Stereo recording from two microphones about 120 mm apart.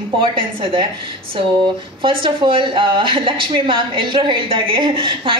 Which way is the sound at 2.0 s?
45° right (ahead or behind).